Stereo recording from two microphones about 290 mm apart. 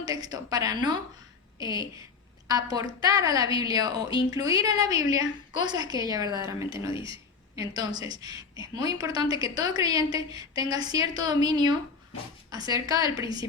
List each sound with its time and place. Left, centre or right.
0.0 s a woman's voice: centre
6.9 s a man's voice: centre
7.5 s a woman's voice: centre